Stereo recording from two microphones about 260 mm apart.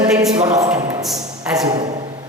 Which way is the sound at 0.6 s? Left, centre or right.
Centre.